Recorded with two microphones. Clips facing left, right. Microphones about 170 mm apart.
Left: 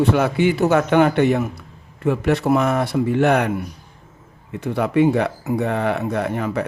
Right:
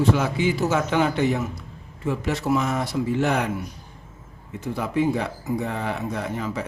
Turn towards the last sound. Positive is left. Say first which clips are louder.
# left 6 dB
turn(degrees=60)  # may be behind; listen again after turning